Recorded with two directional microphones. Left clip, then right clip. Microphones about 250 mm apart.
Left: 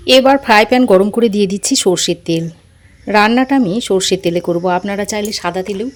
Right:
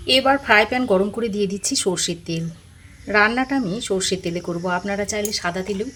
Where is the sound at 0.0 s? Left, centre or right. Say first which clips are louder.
Left 8 dB; left.